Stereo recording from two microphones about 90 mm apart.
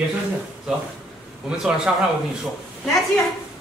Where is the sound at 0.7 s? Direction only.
10° right (ahead or behind).